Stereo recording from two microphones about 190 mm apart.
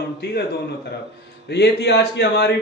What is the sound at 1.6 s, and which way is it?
Speech, 60° left (ahead or behind).